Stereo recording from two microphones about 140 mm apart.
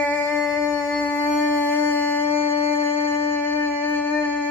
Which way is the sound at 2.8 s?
15° left (ahead or behind).